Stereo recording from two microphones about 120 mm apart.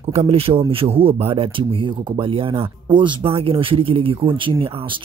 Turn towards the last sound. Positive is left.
turn(degrees=-45)  # may be behind; listen again after turning